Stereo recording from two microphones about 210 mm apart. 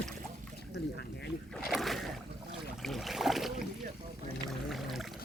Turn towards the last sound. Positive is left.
turn(degrees=0)  # may be behind; listen again after turning